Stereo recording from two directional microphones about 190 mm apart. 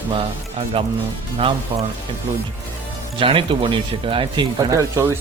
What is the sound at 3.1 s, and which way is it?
Speech, 30° right (ahead or behind).